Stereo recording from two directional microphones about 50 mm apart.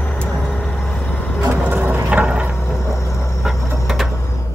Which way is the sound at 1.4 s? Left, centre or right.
Right.